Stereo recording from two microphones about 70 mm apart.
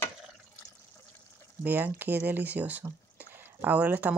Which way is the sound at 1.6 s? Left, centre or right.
Right.